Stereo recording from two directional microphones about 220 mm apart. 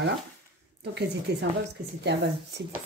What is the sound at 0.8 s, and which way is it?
Speech, 50° right (ahead or behind).